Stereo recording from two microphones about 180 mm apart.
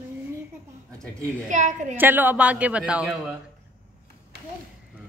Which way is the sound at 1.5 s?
40° right (ahead or behind).